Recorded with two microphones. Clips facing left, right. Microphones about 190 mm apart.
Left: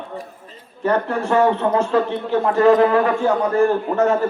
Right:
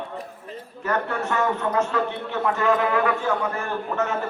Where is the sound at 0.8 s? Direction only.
30° left (ahead or behind).